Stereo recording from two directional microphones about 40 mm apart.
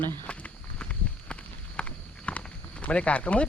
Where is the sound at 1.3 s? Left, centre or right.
Left.